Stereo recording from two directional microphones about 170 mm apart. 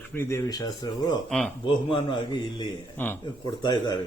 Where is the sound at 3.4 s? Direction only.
25° left (ahead or behind).